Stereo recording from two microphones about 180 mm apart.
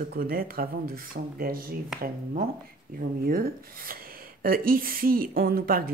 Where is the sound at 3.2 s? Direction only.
55° right (ahead or behind).